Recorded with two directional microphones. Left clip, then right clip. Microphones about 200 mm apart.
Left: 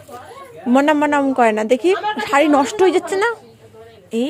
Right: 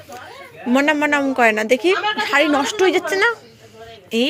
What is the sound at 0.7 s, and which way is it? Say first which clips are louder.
A woman's voice: left 2 dB; 25° left (ahead or behind).